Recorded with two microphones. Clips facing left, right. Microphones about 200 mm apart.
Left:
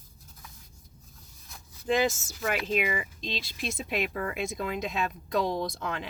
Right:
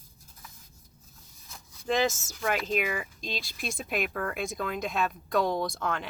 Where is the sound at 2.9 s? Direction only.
50° right (ahead or behind).